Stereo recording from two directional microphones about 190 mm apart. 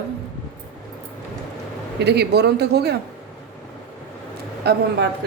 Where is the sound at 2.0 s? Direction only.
60° right (ahead or behind).